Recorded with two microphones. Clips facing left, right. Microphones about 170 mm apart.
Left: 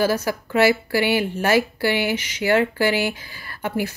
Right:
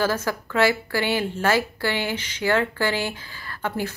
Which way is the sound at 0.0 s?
10° left (ahead or behind).